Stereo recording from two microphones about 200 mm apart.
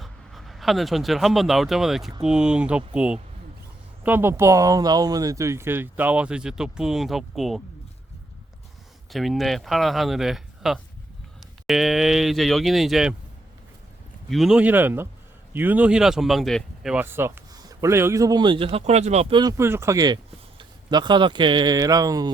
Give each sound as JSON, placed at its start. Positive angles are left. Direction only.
{"t": 0.0, "sound": "speech", "side_deg": 0}
{"t": 9.1, "sound": "speech", "side_deg": 0}
{"t": 14.3, "sound": "speech", "side_deg": 0}